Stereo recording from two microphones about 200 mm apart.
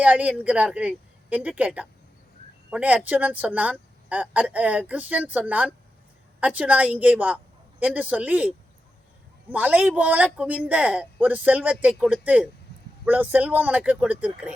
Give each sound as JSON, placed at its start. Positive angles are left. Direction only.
{"t": 0.0, "sound": "speech", "side_deg": -5}
{"t": 9.5, "sound": "speech", "side_deg": -10}